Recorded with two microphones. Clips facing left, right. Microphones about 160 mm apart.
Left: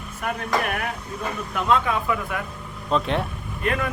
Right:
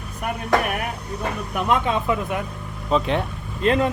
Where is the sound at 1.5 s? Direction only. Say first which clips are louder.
Even; 15° right (ahead or behind).